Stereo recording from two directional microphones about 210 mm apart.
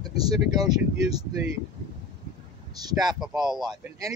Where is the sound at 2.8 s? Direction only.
20° right (ahead or behind).